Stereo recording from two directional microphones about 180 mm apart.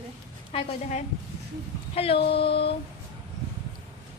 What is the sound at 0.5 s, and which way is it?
Speech, 40° left (ahead or behind).